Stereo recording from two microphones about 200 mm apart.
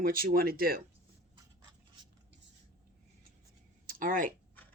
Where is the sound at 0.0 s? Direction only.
45° right (ahead or behind).